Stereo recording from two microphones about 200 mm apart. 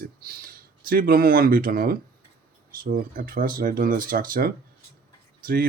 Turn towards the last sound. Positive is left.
turn(degrees=-45)  # may be behind; listen again after turning